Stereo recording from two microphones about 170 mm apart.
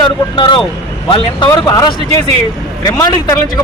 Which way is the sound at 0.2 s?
25° left (ahead or behind).